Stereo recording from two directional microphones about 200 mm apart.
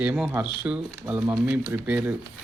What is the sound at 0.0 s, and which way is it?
Speech, 5° right (ahead or behind).